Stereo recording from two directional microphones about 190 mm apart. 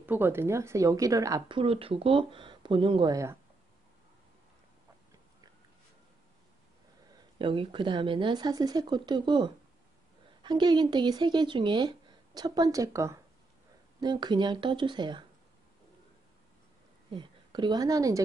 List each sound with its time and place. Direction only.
0.0 s speech: 10° right (ahead or behind)
1.6 s speech: 30° right (ahead or behind)
7.3 s speech: 25° right (ahead or behind)
17.1 s a woman's voice: 25° right (ahead or behind)